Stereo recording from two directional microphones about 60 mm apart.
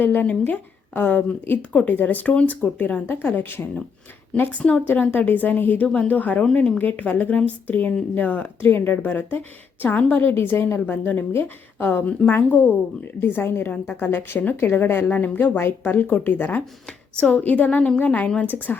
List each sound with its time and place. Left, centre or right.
0.0 s a woman's voice: left
4.5 s a woman's voice: centre; by 15.9 s left
15.9 s a woman's voice: left
17.2 s a woman's voice: centre
17.4 s a woman's voice: left